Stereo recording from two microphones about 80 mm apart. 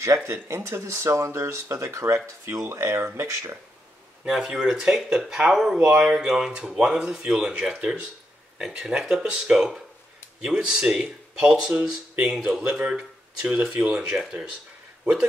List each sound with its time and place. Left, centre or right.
0.0 s speech: right
4.2 s speech: centre